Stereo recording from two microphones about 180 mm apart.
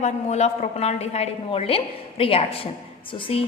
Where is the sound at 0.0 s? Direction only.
40° left (ahead or behind).